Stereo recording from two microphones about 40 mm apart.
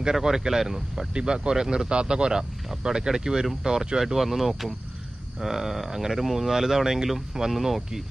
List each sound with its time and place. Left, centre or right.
0.0 s speech: centre
1.1 s speech: right
4.0 s speech: centre